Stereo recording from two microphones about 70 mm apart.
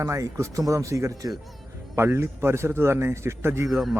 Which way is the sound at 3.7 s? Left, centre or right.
Centre.